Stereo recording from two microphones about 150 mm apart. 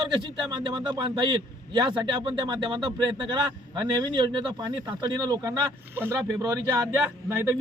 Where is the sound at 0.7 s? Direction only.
30° right (ahead or behind).